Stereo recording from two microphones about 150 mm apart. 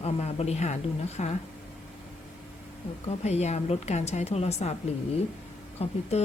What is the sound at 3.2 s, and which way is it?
A woman's voice, 45° left (ahead or behind).